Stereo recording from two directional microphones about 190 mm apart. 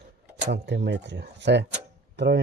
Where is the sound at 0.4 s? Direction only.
65° right (ahead or behind).